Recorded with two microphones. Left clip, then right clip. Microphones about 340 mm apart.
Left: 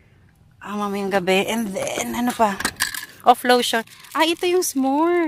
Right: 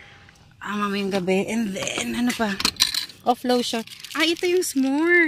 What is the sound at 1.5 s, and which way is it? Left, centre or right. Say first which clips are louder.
Speech: left 3 dB; left.